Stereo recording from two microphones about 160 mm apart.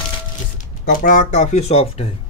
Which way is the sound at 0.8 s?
55° left (ahead or behind).